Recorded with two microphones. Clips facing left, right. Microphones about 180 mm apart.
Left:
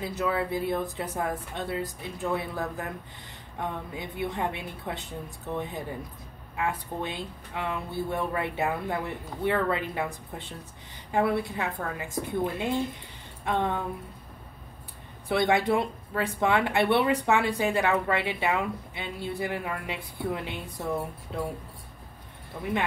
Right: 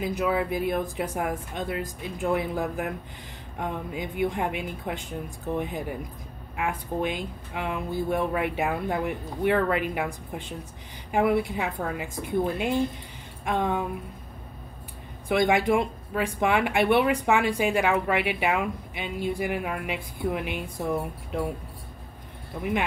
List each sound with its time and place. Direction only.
0.0 s speech: 15° right (ahead or behind)
15.2 s speech: 15° right (ahead or behind)